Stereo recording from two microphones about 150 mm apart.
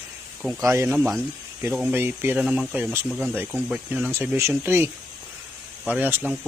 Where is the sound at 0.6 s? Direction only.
20° right (ahead or behind).